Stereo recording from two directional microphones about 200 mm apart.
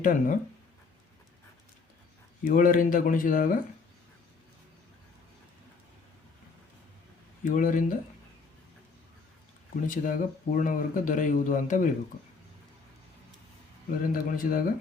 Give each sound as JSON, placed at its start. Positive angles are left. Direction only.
{"t": 0.0, "sound": "speech", "side_deg": 40}
{"t": 2.4, "sound": "speech", "side_deg": 45}
{"t": 7.4, "sound": "speech", "side_deg": 40}
{"t": 9.8, "sound": "speech", "side_deg": 40}
{"t": 14.0, "sound": "speech", "side_deg": 45}